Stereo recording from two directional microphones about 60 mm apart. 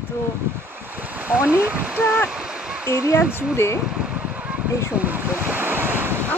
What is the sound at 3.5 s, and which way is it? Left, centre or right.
Speech, left.